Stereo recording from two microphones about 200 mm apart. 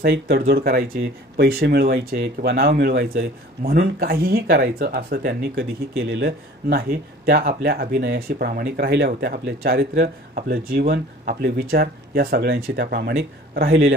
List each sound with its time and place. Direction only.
0.0 s speech: 50° right (ahead or behind)